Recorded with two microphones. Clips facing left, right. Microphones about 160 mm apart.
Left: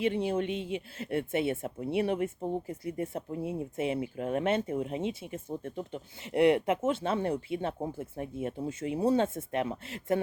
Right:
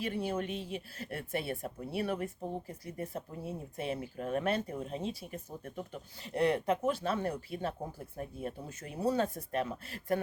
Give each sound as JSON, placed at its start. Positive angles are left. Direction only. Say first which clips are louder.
{"t": 0.0, "sound": "speech", "louder": "left 6 dB", "side_deg": 20}